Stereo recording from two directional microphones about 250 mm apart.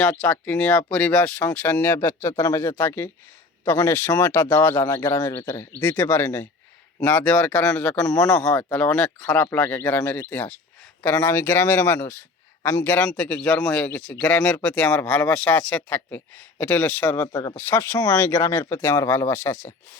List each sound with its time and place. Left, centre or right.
0.0 s speech: centre